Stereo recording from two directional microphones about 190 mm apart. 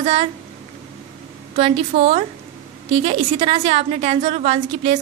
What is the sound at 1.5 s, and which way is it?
A woman's voice, 35° right (ahead or behind).